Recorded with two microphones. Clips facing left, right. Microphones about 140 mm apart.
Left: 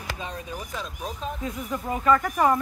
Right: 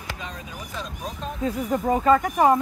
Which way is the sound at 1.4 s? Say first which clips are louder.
Right 10 dB; 35° right (ahead or behind).